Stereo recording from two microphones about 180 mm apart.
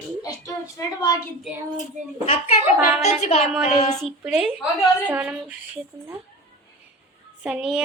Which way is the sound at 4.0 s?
Centre (ahead or behind).